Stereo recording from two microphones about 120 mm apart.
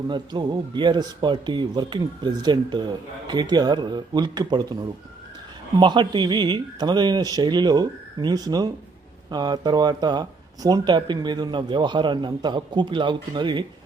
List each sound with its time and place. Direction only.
0.1 s speech: 40° right (ahead or behind)
5.8 s speech: 40° right (ahead or behind)